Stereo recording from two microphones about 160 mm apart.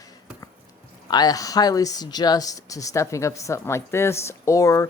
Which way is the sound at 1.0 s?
25° left (ahead or behind).